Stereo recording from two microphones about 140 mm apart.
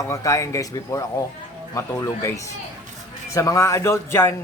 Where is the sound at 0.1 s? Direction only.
20° left (ahead or behind).